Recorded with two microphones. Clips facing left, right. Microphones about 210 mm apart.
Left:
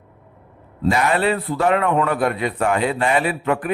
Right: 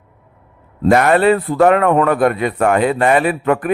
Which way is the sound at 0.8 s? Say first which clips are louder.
Right 7 dB; 55° right (ahead or behind).